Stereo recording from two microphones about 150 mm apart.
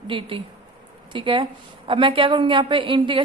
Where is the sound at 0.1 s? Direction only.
35° right (ahead or behind).